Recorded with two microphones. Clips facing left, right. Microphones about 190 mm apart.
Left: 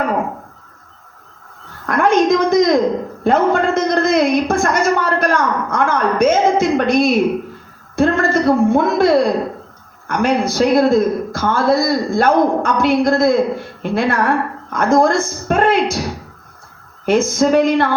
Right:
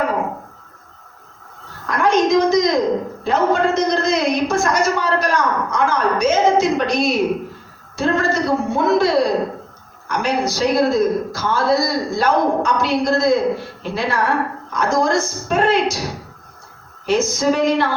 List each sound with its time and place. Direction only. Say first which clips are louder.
1.9 s a sound: left 2 dB; 55° left (ahead or behind)
3.2 s a woman's voice: left 3 dB; 55° left (ahead or behind)
17.1 s a woman's voice: left 4 dB; 55° left (ahead or behind)